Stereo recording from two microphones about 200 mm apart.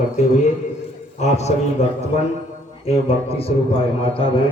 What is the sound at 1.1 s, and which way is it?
Speech, 35° left (ahead or behind).